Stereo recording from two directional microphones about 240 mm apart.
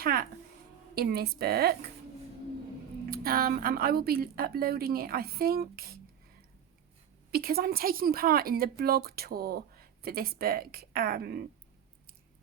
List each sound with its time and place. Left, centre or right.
0.0 s a sound: right
0.9 s a woman's voice: right
3.1 s a woman's voice: right
7.3 s a woman's voice: right